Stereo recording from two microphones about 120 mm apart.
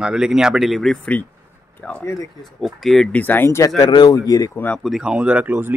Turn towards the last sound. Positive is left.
turn(degrees=-15)  # may be behind; listen again after turning